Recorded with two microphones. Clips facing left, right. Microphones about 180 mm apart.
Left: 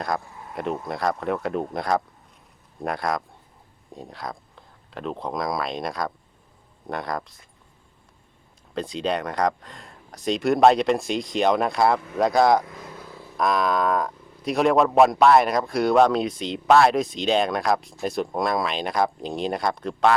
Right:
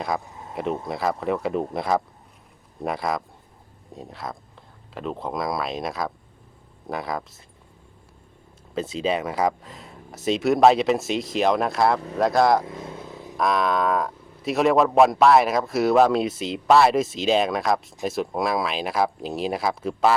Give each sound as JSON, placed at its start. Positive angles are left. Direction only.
{"t": 0.2, "sound": "a sound", "side_deg": -20}
{"t": 0.5, "sound": "speech", "side_deg": 0}
{"t": 8.7, "sound": "speech", "side_deg": -5}
{"t": 12.6, "sound": "vehicle", "side_deg": -25}
{"t": 13.3, "sound": "speech", "side_deg": 0}